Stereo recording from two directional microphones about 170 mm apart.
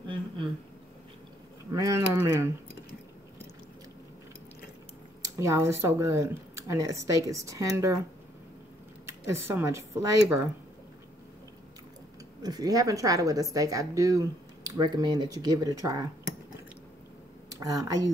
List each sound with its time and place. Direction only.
0.0 s a sound: 30° right (ahead or behind)
1.7 s a sound: 20° right (ahead or behind)
5.2 s speech: 15° right (ahead or behind)
9.0 s speech: 15° right (ahead or behind)
12.4 s a woman's voice: 20° right (ahead or behind)
17.6 s a woman's voice: 20° right (ahead or behind)